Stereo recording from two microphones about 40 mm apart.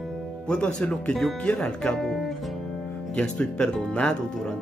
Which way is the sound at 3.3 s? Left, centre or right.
Centre.